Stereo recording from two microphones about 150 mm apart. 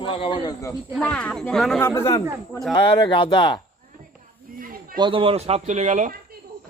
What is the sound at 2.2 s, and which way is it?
Speech, 25° right (ahead or behind).